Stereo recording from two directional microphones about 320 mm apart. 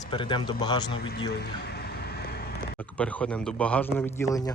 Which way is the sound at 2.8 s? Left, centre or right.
Centre.